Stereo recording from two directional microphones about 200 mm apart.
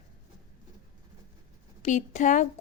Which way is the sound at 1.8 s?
40° left (ahead or behind).